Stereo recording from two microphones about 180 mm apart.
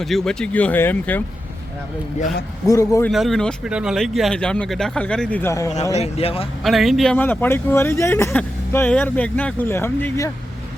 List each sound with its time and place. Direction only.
0.0 s speech: centre (ahead or behind)
2.6 s a man's voice: 20° left (ahead or behind)
3.1 s speech: centre (ahead or behind)
6.0 s speech: 35° left (ahead or behind)
6.7 s speech: centre (ahead or behind); by 10.3 s 15° left (ahead or behind)